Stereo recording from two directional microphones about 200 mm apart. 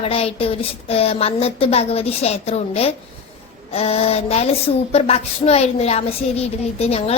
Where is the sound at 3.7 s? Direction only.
30° left (ahead or behind).